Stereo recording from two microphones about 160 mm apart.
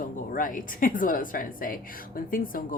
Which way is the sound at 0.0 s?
60° left (ahead or behind).